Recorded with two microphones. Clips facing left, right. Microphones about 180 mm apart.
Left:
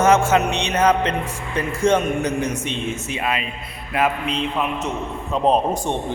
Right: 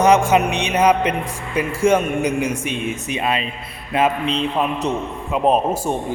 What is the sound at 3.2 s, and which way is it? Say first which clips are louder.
A man's voice: right 3 dB; 30° right (ahead or behind).